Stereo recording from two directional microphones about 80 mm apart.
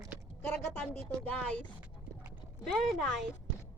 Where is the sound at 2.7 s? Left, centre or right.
Centre.